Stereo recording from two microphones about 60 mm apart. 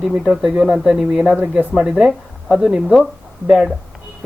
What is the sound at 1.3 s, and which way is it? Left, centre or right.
Speech, right.